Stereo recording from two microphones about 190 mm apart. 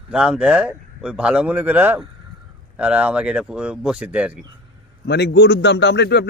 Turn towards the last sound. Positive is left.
turn(degrees=60)  # may be behind; listen again after turning